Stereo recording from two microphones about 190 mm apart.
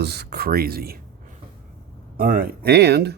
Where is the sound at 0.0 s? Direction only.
60° right (ahead or behind).